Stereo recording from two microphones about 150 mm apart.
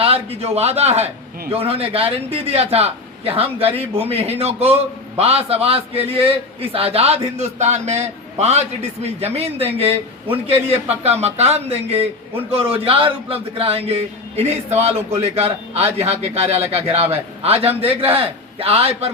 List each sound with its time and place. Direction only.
0.0 s a man's voice: 40° right (ahead or behind)